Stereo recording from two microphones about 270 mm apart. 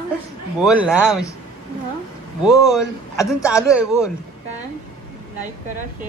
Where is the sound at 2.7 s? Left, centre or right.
Centre.